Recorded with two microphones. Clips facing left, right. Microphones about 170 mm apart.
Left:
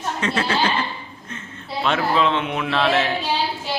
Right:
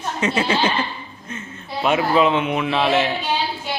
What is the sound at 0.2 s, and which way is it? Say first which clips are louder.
Speech: right 3 dB; 15° right (ahead or behind).